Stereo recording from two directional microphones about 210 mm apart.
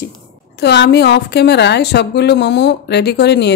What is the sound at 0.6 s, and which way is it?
A woman's voice, 50° left (ahead or behind).